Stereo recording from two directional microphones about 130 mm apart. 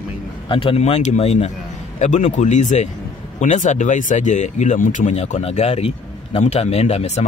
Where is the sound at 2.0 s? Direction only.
65° left (ahead or behind).